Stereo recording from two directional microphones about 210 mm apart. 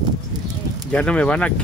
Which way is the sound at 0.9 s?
5° left (ahead or behind).